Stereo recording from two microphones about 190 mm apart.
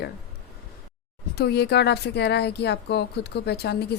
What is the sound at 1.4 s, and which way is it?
Speech, 60° left (ahead or behind).